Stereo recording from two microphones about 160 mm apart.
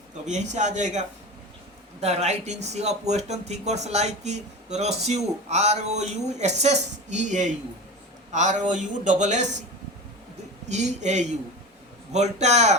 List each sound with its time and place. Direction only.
0.3 s speech: 45° right (ahead or behind)
10.7 s speech: 45° right (ahead or behind)